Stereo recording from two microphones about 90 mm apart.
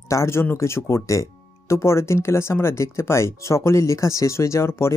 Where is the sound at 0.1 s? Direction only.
30° left (ahead or behind).